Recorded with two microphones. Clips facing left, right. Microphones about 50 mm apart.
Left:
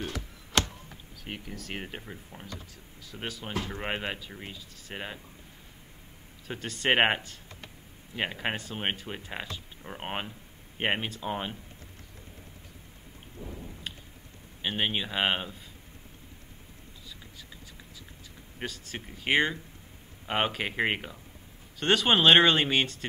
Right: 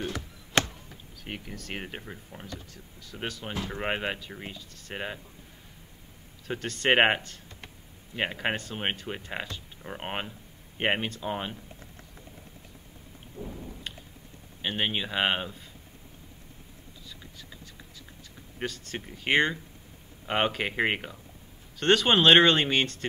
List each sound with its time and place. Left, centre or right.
1.2 s speech: centre
3.7 s speech: centre
6.4 s speech: centre
8.2 s speech: centre
13.4 s rain: right
14.6 s speech: centre
18.6 s speech: centre